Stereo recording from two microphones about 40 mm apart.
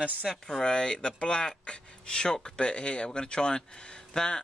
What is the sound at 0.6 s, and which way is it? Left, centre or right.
Speech, left.